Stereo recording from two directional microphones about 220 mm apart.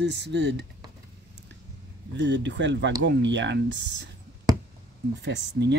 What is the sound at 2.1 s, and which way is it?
Speech, 55° right (ahead or behind).